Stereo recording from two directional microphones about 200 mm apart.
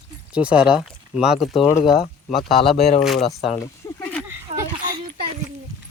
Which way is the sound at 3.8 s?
15° left (ahead or behind).